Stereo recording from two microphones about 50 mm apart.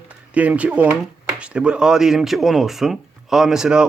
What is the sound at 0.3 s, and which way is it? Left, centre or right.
A man's voice, right.